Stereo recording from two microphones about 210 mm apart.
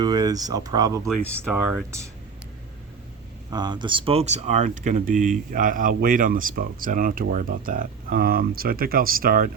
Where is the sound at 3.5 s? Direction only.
20° right (ahead or behind).